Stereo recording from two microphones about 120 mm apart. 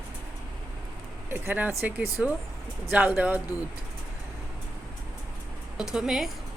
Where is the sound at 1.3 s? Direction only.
15° right (ahead or behind).